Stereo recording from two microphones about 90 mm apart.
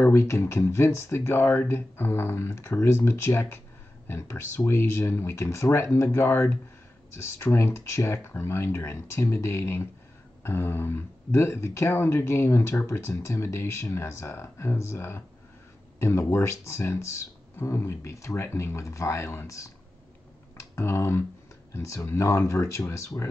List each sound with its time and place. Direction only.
0.0 s speech: 30° left (ahead or behind)